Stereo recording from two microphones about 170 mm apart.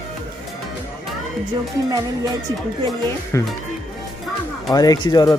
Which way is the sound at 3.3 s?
15° left (ahead or behind).